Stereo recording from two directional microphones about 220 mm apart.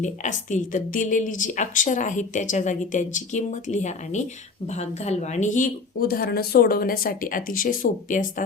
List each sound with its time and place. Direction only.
0.0 s speech: 35° left (ahead or behind)